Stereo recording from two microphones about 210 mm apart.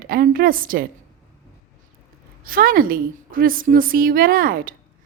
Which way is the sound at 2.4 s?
45° right (ahead or behind).